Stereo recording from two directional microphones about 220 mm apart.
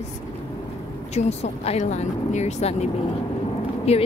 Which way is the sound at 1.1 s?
30° left (ahead or behind).